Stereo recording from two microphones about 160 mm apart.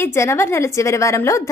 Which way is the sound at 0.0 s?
15° left (ahead or behind).